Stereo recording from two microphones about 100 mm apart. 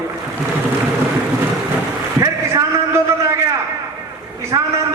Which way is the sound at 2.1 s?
35° right (ahead or behind).